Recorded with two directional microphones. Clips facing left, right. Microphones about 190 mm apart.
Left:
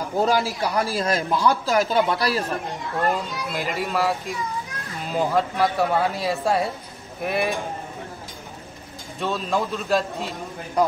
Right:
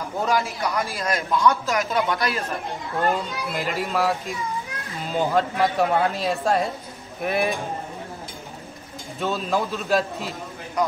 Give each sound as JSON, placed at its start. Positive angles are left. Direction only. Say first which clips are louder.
{"t": 0.2, "sound": "speech", "louder": "left 2 dB", "side_deg": 35}
{"t": 3.0, "sound": "speech", "louder": "right 1 dB", "side_deg": 0}
{"t": 9.2, "sound": "speech", "louder": "even", "side_deg": 0}